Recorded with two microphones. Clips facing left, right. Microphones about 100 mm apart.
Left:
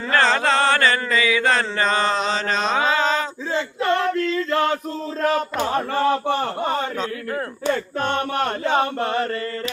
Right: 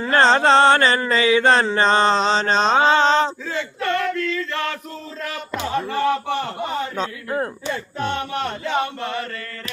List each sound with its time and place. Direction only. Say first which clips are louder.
0.1 s mantra: right 4 dB; 25° right (ahead or behind)
3.5 s male singing: left 2 dB; 30° left (ahead or behind)
5.2 s a sound: left 7 dB; 40° left (ahead or behind)
7.0 s speech: right 1 dB; 20° right (ahead or behind)
7.7 s chant: left 8 dB; 50° left (ahead or behind)